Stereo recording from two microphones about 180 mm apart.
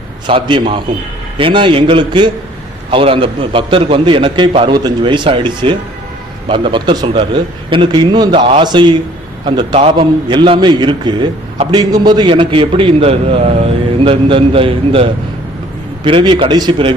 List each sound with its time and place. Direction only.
0.3 s a man's voice: 30° right (ahead or behind)